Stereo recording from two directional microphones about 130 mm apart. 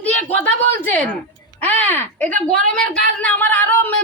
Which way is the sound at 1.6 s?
15° left (ahead or behind).